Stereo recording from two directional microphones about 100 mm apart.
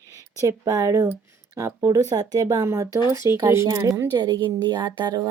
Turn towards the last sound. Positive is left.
turn(degrees=-45)  # may be behind; listen again after turning